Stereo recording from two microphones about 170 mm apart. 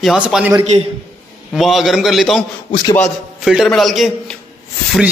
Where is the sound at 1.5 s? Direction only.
Centre (ahead or behind).